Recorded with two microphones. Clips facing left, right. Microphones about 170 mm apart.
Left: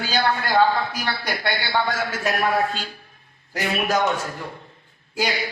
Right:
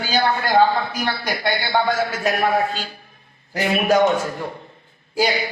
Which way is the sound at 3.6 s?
50° right (ahead or behind).